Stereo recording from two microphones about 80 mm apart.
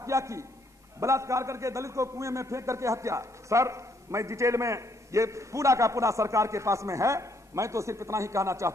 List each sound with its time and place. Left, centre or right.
0.0 s a man's voice: right